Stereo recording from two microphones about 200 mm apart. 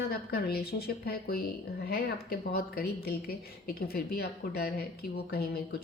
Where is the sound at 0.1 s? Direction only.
50° left (ahead or behind).